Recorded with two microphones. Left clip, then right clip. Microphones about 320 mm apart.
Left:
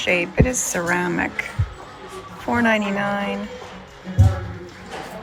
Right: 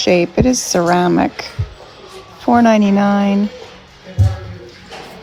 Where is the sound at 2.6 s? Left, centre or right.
Centre.